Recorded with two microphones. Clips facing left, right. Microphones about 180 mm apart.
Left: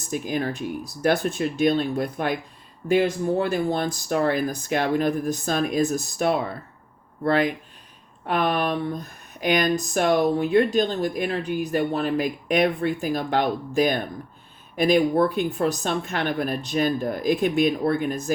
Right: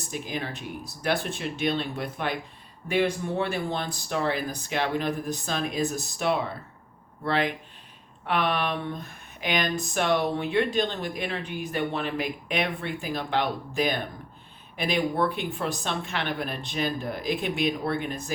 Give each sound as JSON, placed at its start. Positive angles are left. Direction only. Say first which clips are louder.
{"t": 0.1, "sound": "speech", "louder": "left 7 dB", "side_deg": 45}